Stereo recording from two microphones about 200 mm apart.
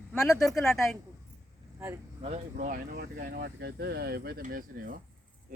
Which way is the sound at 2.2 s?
35° right (ahead or behind).